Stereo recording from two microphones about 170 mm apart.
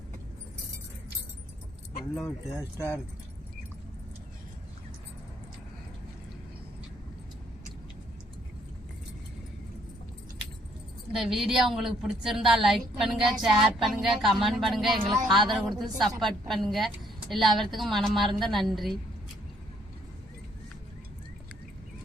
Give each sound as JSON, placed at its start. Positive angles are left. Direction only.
{"t": 2.6, "sound": "speech", "side_deg": 15}
{"t": 11.1, "sound": "a woman's voice", "side_deg": 0}